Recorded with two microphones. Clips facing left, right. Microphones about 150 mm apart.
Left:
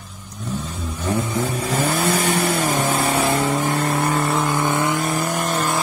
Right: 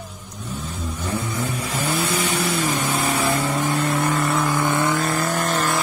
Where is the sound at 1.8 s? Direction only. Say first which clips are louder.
Left 3 dB; 50° left (ahead or behind).